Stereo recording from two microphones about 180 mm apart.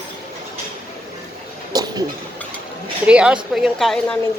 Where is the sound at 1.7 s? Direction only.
20° right (ahead or behind).